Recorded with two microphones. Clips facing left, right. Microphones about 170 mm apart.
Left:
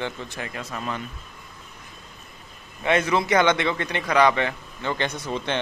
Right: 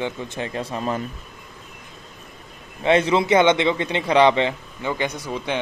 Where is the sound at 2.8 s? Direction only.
25° right (ahead or behind).